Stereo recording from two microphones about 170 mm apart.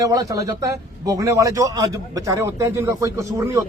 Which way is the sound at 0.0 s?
20° right (ahead or behind).